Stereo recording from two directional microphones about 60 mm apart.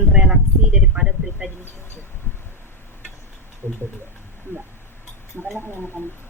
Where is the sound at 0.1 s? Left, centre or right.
Centre.